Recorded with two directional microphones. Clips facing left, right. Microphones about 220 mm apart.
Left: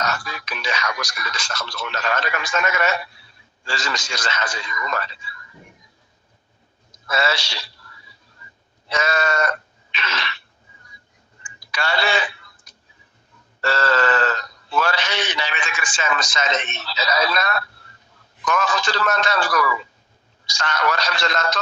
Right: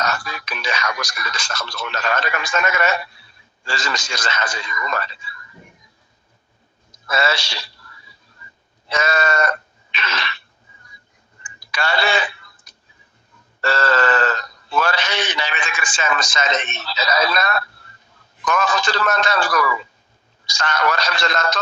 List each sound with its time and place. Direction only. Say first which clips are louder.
0.0 s a man's voice: right 2 dB; 50° right (ahead or behind)
7.1 s a man's voice: right 1 dB; 50° right (ahead or behind)
8.9 s a man's voice: right 1 dB; 50° right (ahead or behind)
9.9 s throat clearing: right 2 dB; 50° right (ahead or behind)
11.7 s a man's voice: right 2 dB; 50° right (ahead or behind)
13.6 s a man's voice: right 1 dB; 50° right (ahead or behind)